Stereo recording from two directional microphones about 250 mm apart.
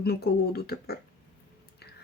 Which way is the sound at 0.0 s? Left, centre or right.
Left.